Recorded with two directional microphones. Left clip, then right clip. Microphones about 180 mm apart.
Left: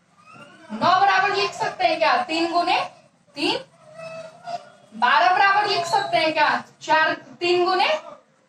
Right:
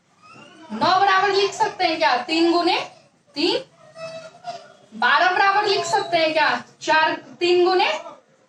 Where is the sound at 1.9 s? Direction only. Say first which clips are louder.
Right 1 dB; 55° right (ahead or behind).